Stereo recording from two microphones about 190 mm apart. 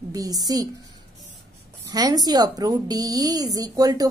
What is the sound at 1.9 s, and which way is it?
Speech, 20° right (ahead or behind).